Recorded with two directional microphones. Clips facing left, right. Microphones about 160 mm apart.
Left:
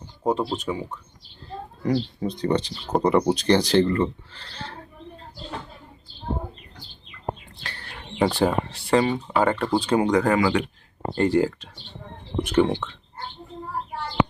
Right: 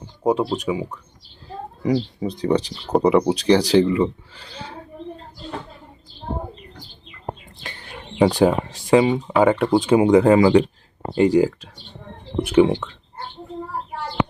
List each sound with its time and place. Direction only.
0.3 s a man's voice: 10° right (ahead or behind)
7.6 s a sound: 20° right (ahead or behind)
9.3 s a man's voice: 10° right (ahead or behind)
9.6 s speech: 20° right (ahead or behind)
11.1 s a man's voice: 10° right (ahead or behind)